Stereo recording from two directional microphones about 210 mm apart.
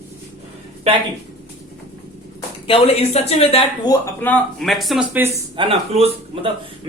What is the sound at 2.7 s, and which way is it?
Speech, 30° left (ahead or behind).